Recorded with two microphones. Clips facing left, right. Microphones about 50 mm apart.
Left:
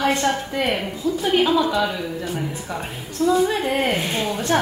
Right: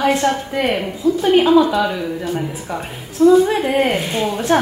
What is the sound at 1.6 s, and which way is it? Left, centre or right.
A woman's voice, centre.